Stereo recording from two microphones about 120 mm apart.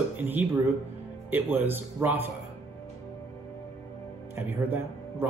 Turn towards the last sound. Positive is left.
turn(degrees=-20)  # may be behind; listen again after turning